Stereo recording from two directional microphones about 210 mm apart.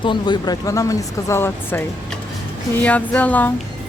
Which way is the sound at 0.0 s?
20° left (ahead or behind).